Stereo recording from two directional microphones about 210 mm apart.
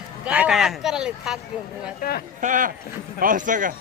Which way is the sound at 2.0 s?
45° left (ahead or behind).